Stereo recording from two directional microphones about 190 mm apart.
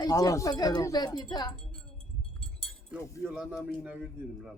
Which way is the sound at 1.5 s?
5° left (ahead or behind).